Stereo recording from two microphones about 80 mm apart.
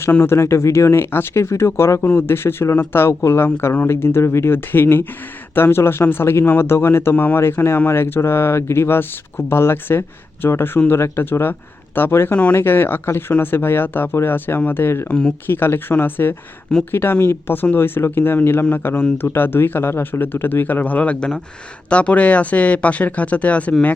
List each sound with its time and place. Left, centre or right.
0.0 s speech: left